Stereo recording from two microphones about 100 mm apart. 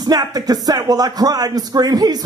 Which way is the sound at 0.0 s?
40° right (ahead or behind).